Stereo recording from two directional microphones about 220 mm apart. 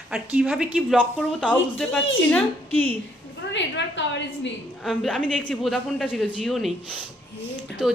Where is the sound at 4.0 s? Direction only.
55° left (ahead or behind).